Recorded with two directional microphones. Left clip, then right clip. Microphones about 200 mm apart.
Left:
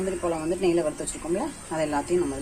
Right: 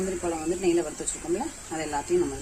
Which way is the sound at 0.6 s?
5° left (ahead or behind).